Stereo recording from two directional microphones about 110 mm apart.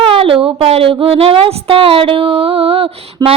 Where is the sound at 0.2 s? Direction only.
55° right (ahead or behind).